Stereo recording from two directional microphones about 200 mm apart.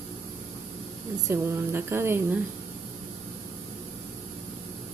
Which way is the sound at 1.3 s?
10° right (ahead or behind).